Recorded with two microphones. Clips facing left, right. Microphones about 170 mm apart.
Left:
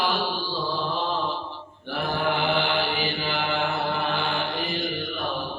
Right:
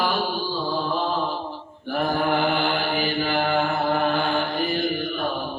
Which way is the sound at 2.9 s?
45° right (ahead or behind).